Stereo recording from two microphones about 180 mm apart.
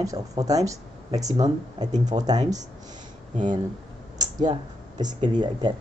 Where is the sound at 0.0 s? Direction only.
20° right (ahead or behind).